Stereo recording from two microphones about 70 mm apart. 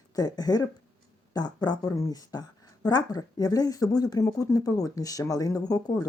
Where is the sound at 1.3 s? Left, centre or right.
Left.